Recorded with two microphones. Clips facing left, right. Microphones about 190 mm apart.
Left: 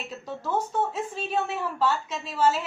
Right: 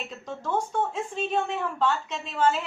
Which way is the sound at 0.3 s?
5° left (ahead or behind).